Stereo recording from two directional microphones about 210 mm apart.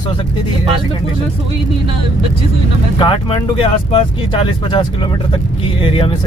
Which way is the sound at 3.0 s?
25° left (ahead or behind).